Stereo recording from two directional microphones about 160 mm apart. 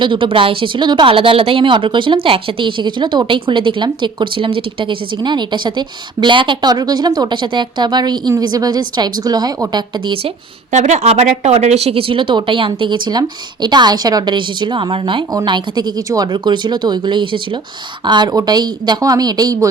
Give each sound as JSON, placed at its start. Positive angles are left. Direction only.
{"t": 0.0, "sound": "speech", "side_deg": -30}
{"t": 10.7, "sound": "a woman's voice", "side_deg": -45}